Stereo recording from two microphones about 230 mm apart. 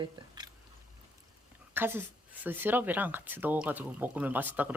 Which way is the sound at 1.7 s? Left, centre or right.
Centre.